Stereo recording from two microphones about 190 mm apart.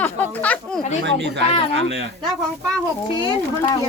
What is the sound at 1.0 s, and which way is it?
Speech, 70° right (ahead or behind).